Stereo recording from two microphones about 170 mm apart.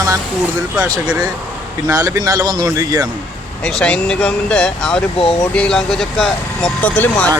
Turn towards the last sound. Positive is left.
turn(degrees=10)  # may be behind; listen again after turning